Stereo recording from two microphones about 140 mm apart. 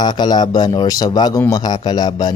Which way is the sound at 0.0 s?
30° left (ahead or behind).